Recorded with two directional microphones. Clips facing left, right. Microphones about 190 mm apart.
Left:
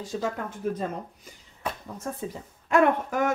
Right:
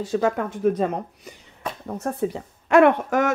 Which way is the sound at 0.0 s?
70° right (ahead or behind).